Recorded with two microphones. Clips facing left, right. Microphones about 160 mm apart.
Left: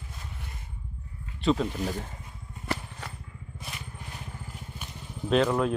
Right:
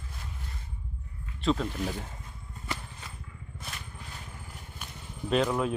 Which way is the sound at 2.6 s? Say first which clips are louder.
Left 5 dB; 65° left (ahead or behind).